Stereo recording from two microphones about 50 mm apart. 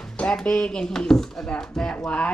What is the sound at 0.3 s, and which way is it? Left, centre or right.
Speech, centre.